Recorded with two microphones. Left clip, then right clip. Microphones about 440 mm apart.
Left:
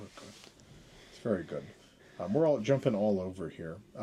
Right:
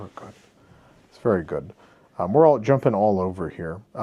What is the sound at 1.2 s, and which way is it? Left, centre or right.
Speech, right.